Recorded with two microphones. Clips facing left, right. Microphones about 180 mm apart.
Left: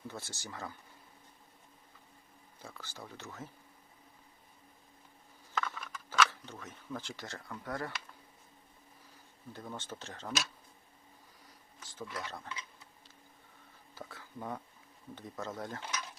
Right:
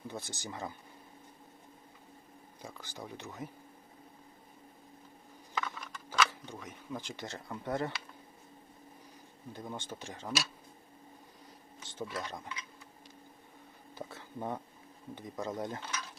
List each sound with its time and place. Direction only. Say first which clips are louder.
0.1 s speech: right 3 dB; 15° right (ahead or behind)
2.6 s speech: right 3 dB; 15° right (ahead or behind)
5.5 s a sound: even; 10° right (ahead or behind)
6.4 s speech: right 2 dB; 15° right (ahead or behind)
9.5 s speech: right 2 dB; 15° right (ahead or behind)
11.8 s a sound: right 4 dB; 25° right (ahead or behind)
12.2 s speech: right 2 dB; 15° right (ahead or behind)
13.9 s whispering: right 4 dB; 25° right (ahead or behind)
15.1 s speech: right 3 dB; 15° right (ahead or behind)